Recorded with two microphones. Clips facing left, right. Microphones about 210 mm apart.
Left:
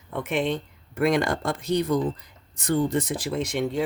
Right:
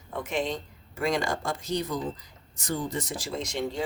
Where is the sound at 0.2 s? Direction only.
60° left (ahead or behind).